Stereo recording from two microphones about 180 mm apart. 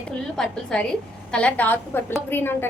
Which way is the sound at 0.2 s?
5° left (ahead or behind).